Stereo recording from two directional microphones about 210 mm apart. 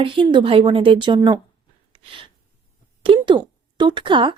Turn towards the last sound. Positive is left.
turn(degrees=-25)  # may be behind; listen again after turning